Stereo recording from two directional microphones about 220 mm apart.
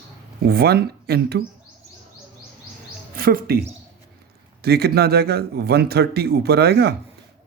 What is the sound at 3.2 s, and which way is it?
Speech, 40° right (ahead or behind).